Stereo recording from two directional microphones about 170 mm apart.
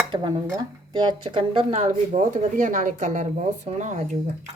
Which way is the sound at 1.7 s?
45° right (ahead or behind).